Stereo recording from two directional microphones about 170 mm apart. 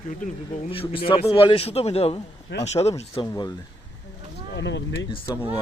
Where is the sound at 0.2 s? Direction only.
50° left (ahead or behind).